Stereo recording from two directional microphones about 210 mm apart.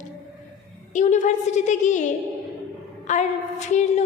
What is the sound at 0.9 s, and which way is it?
A woman's voice, 35° left (ahead or behind).